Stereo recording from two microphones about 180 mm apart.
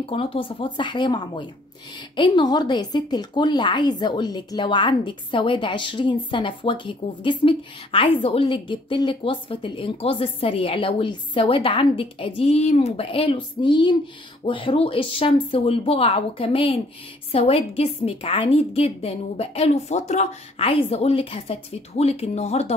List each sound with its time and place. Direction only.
0.0 s a woman's voice: 30° left (ahead or behind)